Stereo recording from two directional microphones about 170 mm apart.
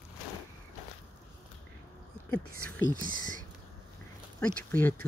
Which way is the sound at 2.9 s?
55° right (ahead or behind).